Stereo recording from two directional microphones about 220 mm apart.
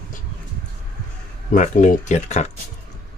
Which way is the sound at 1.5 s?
35° left (ahead or behind).